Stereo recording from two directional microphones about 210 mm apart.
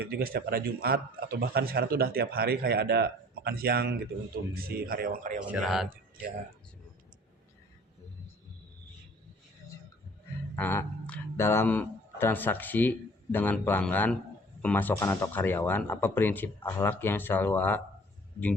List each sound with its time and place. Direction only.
0.0 s a man's voice: 45° right (ahead or behind)
5.5 s speech: centre (ahead or behind)
10.5 s speech: 10° left (ahead or behind)